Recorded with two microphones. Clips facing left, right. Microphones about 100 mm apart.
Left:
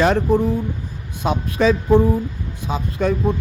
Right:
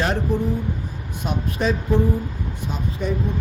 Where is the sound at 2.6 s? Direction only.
90° left.